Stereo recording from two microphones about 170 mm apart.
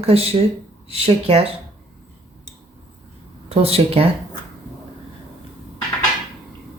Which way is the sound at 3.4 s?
35° right (ahead or behind).